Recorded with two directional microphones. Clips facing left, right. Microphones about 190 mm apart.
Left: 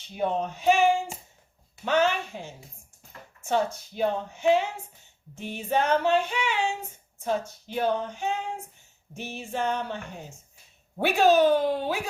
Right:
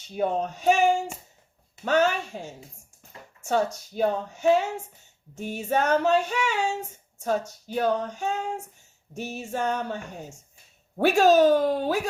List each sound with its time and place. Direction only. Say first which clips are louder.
0.2 s female singing: right 2 dB; 40° right (ahead or behind)
3.9 s female singing: right 2 dB; 40° right (ahead or behind)